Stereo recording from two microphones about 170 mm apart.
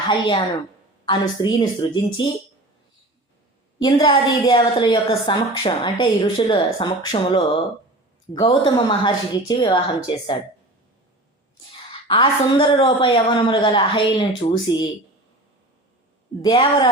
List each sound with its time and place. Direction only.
0.1 s a woman's voice: 30° left (ahead or behind)
3.8 s a woman's voice: 25° left (ahead or behind)
11.9 s a woman's voice: 30° left (ahead or behind)
16.4 s a woman's voice: 25° left (ahead or behind)